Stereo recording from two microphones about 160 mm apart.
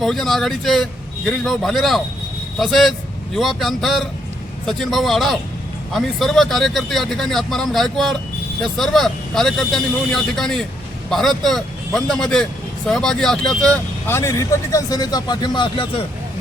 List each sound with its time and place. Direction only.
0.0 s speech: centre (ahead or behind)
14.2 s speech: 20° left (ahead or behind)